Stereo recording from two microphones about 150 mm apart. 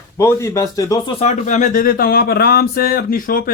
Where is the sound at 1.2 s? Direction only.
55° left (ahead or behind).